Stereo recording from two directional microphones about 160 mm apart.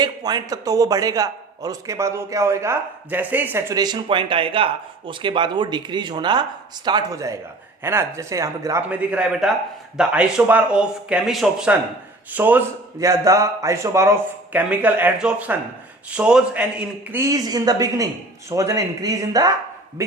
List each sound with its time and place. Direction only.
0.0 s a man's voice: 25° right (ahead or behind)
3.8 s a man's voice: 25° right (ahead or behind); by 17.2 s 10° right (ahead or behind)
17.2 s a man's voice: 25° right (ahead or behind)